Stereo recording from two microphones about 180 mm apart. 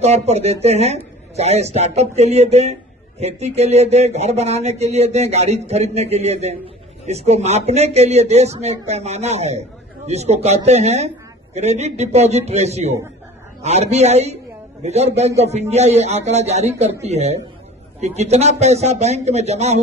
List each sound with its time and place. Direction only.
0.0 s a man's voice: 35° right (ahead or behind)